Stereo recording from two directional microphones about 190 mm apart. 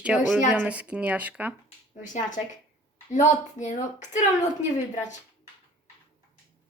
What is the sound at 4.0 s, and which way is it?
Child singing, 40° left (ahead or behind).